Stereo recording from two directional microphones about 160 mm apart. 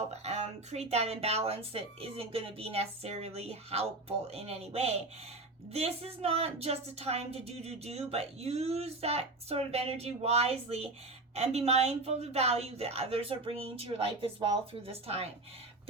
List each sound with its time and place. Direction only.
0.1 s a woman's voice: 45° right (ahead or behind)